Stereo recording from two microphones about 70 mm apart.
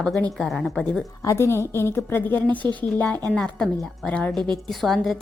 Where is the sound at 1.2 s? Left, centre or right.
Left.